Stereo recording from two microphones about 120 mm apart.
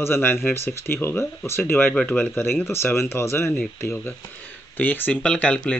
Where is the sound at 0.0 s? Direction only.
20° left (ahead or behind).